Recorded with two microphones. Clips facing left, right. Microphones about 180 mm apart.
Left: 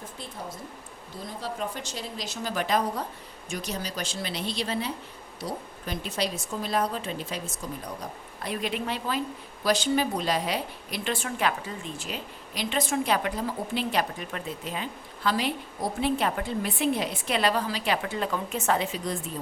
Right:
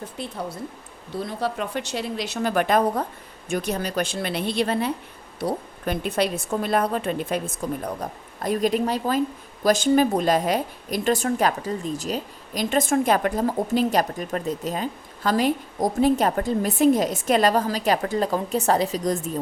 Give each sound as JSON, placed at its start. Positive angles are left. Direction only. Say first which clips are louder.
{"t": 0.2, "sound": "a woman's voice", "louder": "right 8 dB", "side_deg": -70}
{"t": 8.0, "sound": "a woman's voice", "louder": "right 8 dB", "side_deg": -45}